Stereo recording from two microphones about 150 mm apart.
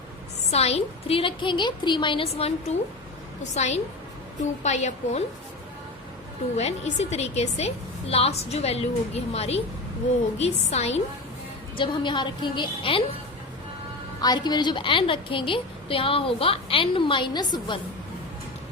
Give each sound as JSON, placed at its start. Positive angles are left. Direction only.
{"t": 0.5, "sound": "a woman's voice", "side_deg": 45}
{"t": 6.6, "sound": "a woman's voice", "side_deg": 45}
{"t": 11.8, "sound": "a woman's voice", "side_deg": 30}
{"t": 14.2, "sound": "a woman's voice", "side_deg": 25}